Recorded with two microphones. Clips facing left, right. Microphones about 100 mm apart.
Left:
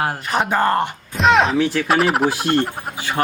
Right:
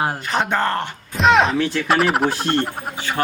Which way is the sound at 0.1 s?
5° left (ahead or behind).